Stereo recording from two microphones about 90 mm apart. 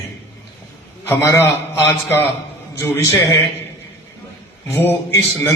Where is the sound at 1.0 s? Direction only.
25° left (ahead or behind).